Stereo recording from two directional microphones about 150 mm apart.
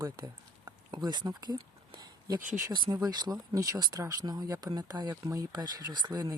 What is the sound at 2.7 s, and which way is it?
Speech, 30° right (ahead or behind).